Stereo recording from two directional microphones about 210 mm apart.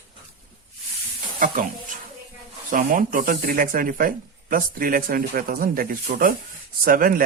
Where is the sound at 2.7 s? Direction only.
40° right (ahead or behind).